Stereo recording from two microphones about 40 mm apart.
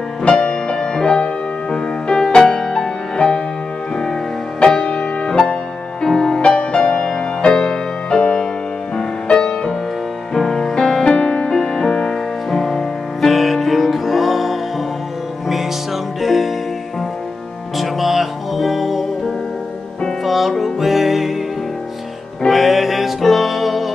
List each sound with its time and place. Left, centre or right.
0.2 s music: left
4.8 s music: left
6.4 s music: left
10.3 s music: centre
16.2 s music: centre
17.7 s music: centre
22.5 s music: centre